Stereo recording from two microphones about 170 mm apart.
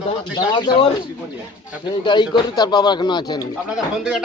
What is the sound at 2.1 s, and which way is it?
A man's voice, 25° left (ahead or behind).